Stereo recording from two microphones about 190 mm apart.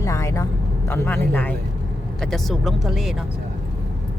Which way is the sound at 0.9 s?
10° left (ahead or behind).